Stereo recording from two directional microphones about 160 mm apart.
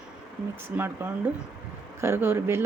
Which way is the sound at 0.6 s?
15° right (ahead or behind).